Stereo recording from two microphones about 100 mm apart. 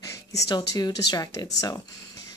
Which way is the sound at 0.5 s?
40° left (ahead or behind).